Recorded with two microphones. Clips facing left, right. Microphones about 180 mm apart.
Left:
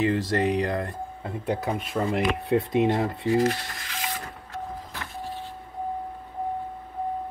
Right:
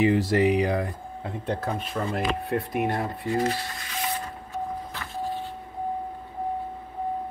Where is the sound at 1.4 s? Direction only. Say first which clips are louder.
Left 2 dB; 5° left (ahead or behind).